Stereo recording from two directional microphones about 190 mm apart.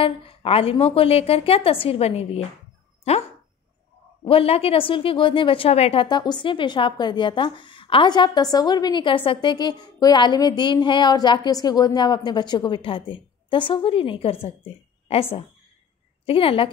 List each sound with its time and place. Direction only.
0.0 s a woman's voice: 30° left (ahead or behind)
16.3 s a woman's voice: 30° left (ahead or behind)